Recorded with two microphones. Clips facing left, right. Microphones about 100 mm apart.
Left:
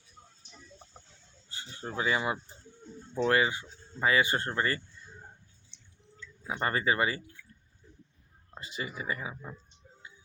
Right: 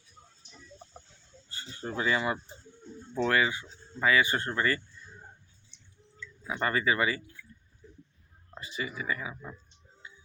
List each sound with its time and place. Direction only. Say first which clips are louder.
1.5 s speech: right 2 dB; 15° left (ahead or behind)
3.2 s speech: left 1 dB; 25° left (ahead or behind)
6.5 s speech: right 1 dB; 30° left (ahead or behind)
8.5 s speech: right 2 dB; 35° left (ahead or behind)
9.3 s speech: even; 20° left (ahead or behind)